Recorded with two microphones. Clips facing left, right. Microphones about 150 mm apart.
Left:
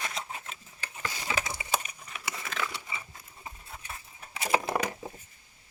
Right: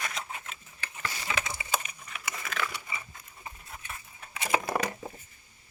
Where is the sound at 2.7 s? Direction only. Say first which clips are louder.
Even; 25° left (ahead or behind).